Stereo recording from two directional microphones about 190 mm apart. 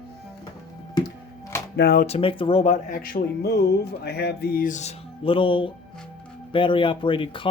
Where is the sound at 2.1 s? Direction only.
30° left (ahead or behind).